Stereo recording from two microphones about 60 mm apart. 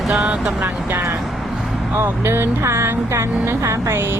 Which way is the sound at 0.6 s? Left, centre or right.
Right.